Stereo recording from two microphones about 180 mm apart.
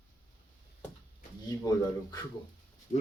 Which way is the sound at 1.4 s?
20° left (ahead or behind).